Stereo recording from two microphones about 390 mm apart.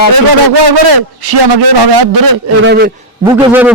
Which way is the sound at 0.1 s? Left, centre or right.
Right.